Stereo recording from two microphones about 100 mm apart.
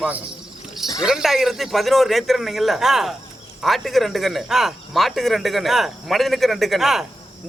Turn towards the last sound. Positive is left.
turn(degrees=0)  # may be behind; listen again after turning